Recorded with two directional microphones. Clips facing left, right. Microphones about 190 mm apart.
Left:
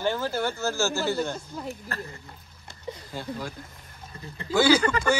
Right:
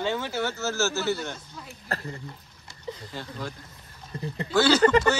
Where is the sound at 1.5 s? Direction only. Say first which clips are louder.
Left 9 dB; 55° left (ahead or behind).